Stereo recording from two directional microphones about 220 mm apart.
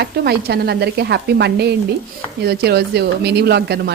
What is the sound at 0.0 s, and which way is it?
A woman's voice, 45° right (ahead or behind).